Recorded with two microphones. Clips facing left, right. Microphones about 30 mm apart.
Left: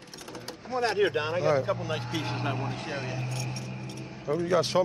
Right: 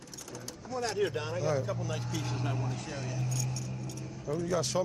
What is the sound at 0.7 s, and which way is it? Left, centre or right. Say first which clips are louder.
Speech: left 6 dB; left.